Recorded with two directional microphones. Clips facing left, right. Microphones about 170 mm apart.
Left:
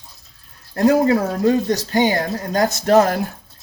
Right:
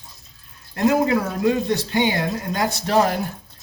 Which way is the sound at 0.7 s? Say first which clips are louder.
Left 3 dB; 40° left (ahead or behind).